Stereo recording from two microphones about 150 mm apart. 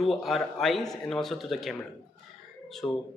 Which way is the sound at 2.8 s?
20° left (ahead or behind).